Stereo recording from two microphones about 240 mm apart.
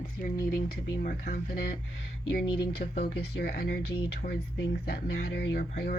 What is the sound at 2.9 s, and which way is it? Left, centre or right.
Speech, left.